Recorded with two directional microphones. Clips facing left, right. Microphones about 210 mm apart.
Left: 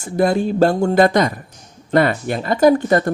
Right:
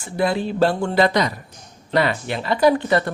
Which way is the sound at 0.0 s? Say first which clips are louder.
Left 5 dB; 45° left (ahead or behind).